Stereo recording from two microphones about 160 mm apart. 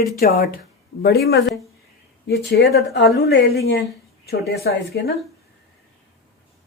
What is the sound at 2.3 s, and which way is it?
Speech, 90° left.